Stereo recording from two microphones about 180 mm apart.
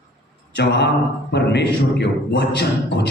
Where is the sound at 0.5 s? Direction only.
70° left (ahead or behind).